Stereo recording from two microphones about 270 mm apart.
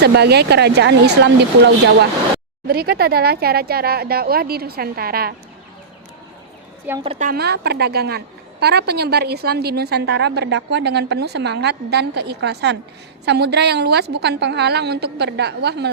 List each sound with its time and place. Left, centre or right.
0.0 s a woman's voice: right
7.0 s a woman's voice: right